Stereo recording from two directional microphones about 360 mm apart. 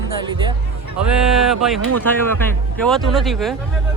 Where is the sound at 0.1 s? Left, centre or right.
Centre.